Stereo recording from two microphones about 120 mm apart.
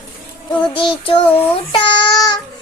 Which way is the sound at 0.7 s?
45° left (ahead or behind).